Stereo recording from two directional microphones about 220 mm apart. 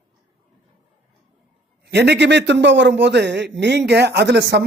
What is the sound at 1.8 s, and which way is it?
A man's voice, 50° right (ahead or behind).